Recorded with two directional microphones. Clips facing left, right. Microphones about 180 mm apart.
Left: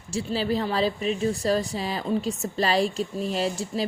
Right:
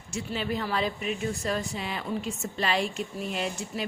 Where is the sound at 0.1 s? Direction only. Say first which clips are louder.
Left 5 dB; 30° left (ahead or behind).